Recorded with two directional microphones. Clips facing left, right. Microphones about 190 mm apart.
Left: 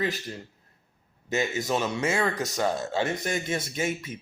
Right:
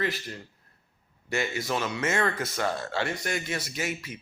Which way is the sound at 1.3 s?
20° left (ahead or behind).